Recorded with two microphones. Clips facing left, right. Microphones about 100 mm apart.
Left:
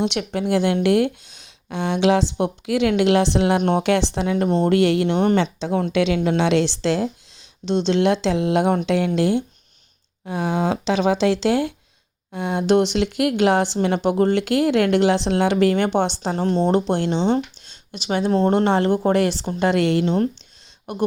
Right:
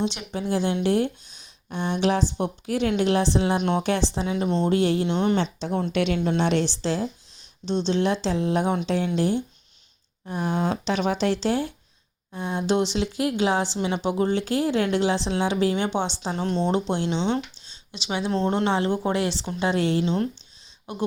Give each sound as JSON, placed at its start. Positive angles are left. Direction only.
{"t": 0.0, "sound": "speech", "side_deg": 60}
{"t": 3.6, "sound": "speech", "side_deg": 50}
{"t": 3.8, "sound": "speech", "side_deg": 75}
{"t": 4.4, "sound": "speech", "side_deg": 45}
{"t": 4.7, "sound": "speech", "side_deg": 70}
{"t": 10.2, "sound": "speech", "side_deg": 90}
{"t": 12.3, "sound": "speech", "side_deg": 65}
{"t": 16.2, "sound": "speech", "side_deg": 45}
{"t": 16.9, "sound": "speech", "side_deg": 55}
{"t": 19.5, "sound": "speech", "side_deg": 65}
{"t": 20.9, "sound": "speech", "side_deg": 55}